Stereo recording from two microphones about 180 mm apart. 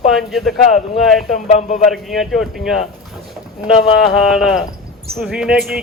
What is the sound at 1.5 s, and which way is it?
Speech, 40° left (ahead or behind).